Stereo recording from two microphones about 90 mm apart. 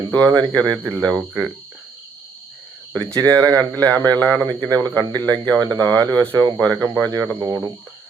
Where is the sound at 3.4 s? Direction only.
40° right (ahead or behind).